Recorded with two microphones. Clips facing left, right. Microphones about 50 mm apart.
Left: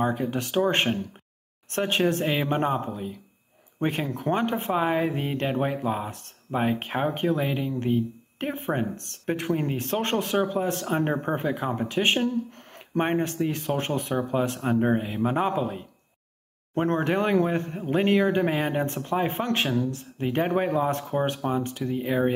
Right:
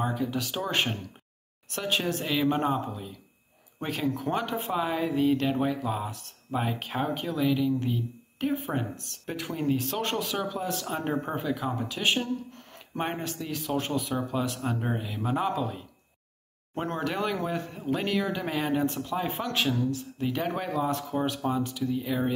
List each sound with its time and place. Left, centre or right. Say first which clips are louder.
0.0 s speech: left 3 dB; left